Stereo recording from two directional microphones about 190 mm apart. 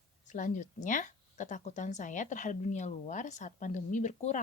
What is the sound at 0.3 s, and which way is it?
A woman's voice, 40° left (ahead or behind).